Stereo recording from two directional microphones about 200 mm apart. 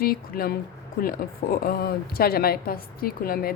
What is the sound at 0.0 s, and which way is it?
A woman's voice, 45° left (ahead or behind).